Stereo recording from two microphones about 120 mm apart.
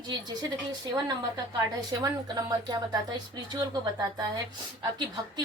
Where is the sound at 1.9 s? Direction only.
35° right (ahead or behind).